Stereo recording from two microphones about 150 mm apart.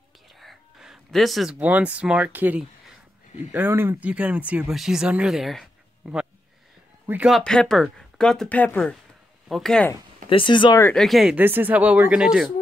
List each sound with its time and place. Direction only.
0.4 s speech: centre (ahead or behind)
10.3 s speech: 35° left (ahead or behind)
11.0 s speech: centre (ahead or behind)
11.3 s speech: 10° right (ahead or behind)